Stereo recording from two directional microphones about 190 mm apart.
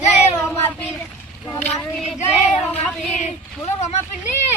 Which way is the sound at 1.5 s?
10° left (ahead or behind).